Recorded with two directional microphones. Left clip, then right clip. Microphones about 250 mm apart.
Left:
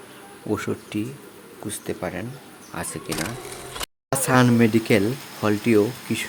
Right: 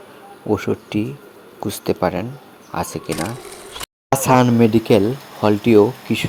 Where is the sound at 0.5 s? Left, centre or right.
Centre.